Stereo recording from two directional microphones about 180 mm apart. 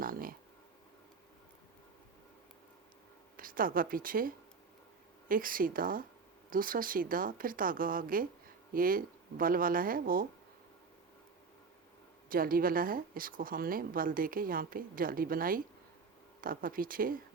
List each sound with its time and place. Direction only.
0.0 s a sound: 50° right (ahead or behind)
3.3 s speech: 50° right (ahead or behind)
12.3 s speech: 55° right (ahead or behind)